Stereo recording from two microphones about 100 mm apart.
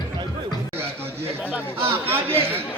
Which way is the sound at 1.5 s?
20° right (ahead or behind).